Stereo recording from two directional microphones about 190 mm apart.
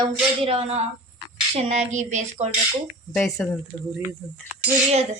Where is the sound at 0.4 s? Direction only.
30° right (ahead or behind).